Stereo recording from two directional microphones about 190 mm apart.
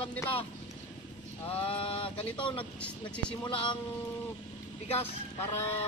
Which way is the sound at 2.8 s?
5° left (ahead or behind).